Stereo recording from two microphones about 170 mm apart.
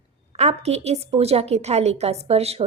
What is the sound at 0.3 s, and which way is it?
A woman's voice, 40° right (ahead or behind).